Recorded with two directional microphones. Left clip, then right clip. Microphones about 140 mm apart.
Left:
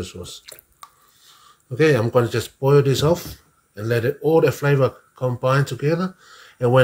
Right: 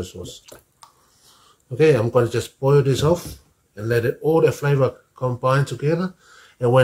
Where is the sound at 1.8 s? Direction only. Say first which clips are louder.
Right 1 dB; 20° left (ahead or behind).